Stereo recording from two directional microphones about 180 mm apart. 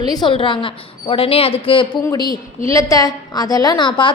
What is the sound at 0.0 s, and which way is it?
A woman's voice, 25° left (ahead or behind).